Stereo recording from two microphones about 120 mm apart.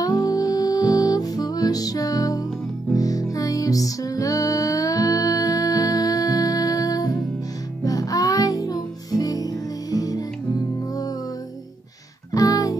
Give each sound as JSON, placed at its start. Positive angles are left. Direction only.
{"t": 0.0, "sound": "music", "side_deg": 30}
{"t": 12.3, "sound": "music", "side_deg": 30}